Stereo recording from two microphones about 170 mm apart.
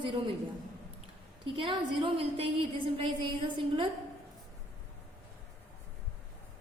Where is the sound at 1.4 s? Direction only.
30° right (ahead or behind).